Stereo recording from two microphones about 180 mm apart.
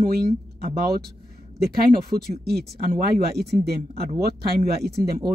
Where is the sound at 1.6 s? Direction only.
60° right (ahead or behind).